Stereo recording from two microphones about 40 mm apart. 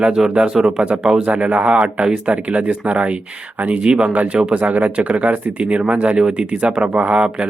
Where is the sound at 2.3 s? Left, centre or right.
Right.